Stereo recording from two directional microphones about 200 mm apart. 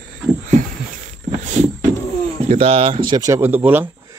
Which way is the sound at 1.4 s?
35° right (ahead or behind).